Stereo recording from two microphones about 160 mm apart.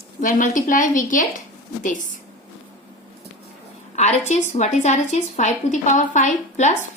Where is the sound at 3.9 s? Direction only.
45° left (ahead or behind).